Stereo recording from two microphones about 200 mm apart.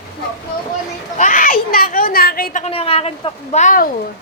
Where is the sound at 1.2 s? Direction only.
40° left (ahead or behind).